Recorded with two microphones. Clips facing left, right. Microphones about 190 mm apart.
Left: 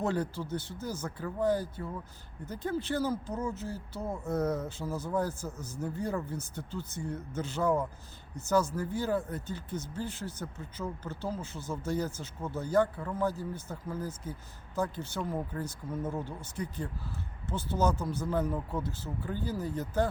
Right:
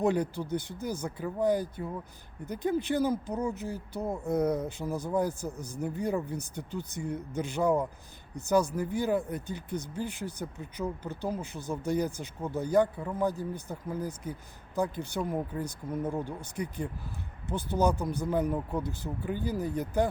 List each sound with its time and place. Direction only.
0.0 s speech: 15° right (ahead or behind)